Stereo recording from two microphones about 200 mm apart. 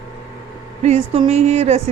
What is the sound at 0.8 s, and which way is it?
A woman's voice, 30° right (ahead or behind).